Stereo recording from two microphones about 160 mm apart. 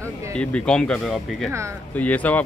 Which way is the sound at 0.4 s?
5° left (ahead or behind).